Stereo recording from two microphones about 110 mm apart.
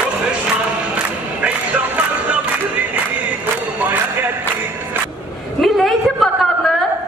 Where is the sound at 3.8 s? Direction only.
15° right (ahead or behind).